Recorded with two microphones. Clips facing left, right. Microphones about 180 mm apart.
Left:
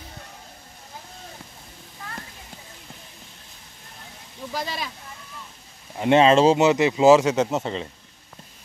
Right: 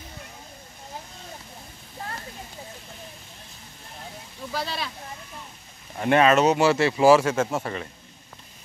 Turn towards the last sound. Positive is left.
turn(degrees=20)  # may be behind; listen again after turning